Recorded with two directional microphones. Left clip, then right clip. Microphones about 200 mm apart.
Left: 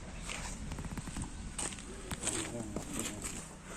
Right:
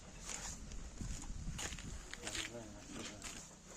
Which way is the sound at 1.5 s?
30° right (ahead or behind).